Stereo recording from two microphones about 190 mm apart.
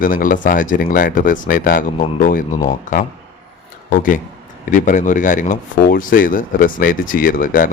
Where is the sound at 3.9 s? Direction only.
45° left (ahead or behind).